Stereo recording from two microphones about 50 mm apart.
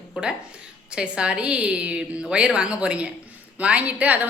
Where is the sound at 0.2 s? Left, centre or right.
Centre.